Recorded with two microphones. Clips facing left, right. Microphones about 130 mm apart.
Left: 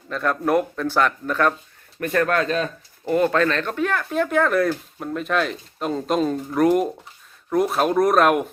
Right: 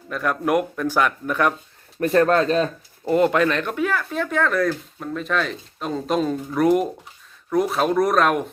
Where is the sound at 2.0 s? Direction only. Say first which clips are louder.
Right 4 dB; 30° right (ahead or behind).